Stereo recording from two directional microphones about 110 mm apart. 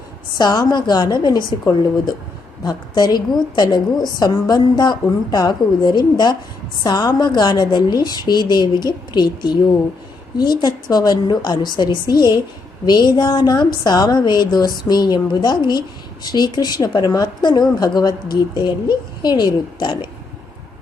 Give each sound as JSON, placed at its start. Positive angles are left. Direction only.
{"t": 0.3, "sound": "a woman's voice", "side_deg": 35}